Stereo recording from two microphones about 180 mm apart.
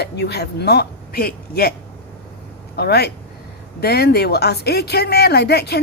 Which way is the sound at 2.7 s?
65° left (ahead or behind).